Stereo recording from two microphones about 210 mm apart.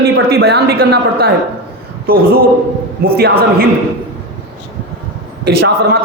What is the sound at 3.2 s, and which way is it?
Speech, 50° right (ahead or behind).